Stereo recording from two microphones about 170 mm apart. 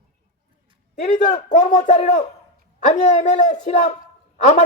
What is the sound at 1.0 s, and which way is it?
A woman's voice, 45° left (ahead or behind).